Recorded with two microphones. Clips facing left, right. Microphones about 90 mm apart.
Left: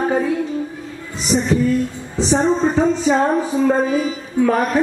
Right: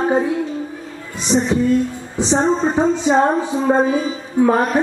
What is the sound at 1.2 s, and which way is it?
Speech, 25° right (ahead or behind).